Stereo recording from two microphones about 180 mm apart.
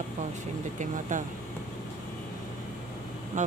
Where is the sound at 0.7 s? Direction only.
45° right (ahead or behind).